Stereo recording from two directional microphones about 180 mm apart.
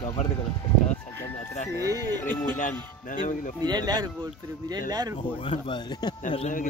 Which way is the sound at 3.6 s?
25° right (ahead or behind).